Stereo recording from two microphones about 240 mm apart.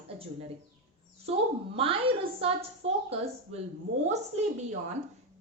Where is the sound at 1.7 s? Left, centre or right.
Right.